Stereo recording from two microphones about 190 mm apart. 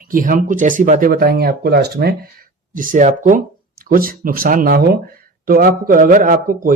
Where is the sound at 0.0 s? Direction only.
45° right (ahead or behind).